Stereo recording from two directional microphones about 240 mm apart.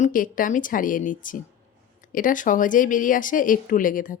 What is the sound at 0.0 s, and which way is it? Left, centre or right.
Speech, left.